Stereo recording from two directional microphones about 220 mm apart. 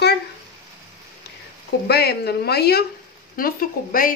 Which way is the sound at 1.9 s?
45° left (ahead or behind).